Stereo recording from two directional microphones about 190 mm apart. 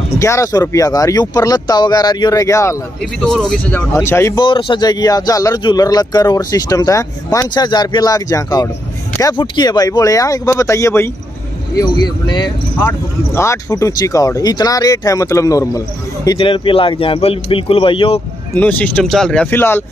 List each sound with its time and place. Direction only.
0.2 s speech: 15° left (ahead or behind)
3.0 s speech: 5° left (ahead or behind)
4.5 s speech: 25° left (ahead or behind)
18.5 s speech: 10° left (ahead or behind)